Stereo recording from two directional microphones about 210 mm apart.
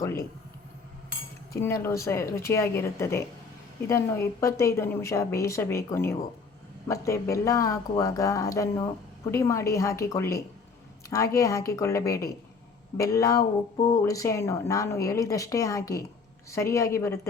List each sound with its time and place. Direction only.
1.5 s a woman's voice: 10° left (ahead or behind)